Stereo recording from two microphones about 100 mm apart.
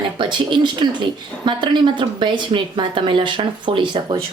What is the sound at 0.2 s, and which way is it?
A woman's voice, 50° right (ahead or behind).